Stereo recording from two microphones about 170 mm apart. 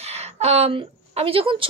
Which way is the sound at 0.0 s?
40° right (ahead or behind).